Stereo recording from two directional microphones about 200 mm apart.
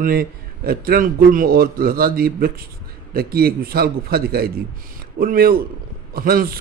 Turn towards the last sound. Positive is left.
turn(degrees=-45)  # may be behind; listen again after turning